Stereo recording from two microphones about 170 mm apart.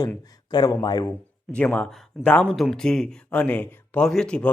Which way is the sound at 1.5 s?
5° left (ahead or behind).